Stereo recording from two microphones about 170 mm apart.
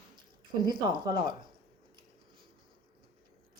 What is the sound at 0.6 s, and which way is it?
Speech, 25° right (ahead or behind).